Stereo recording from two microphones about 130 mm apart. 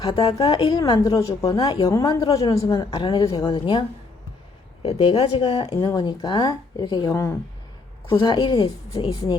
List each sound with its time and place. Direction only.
0.0 s a woman's voice: 30° left (ahead or behind)
3.4 s speech: 40° left (ahead or behind); by 7.3 s 20° left (ahead or behind)
8.2 s speech: 35° left (ahead or behind)